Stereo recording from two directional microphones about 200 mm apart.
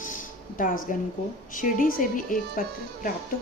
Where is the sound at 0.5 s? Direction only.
40° left (ahead or behind).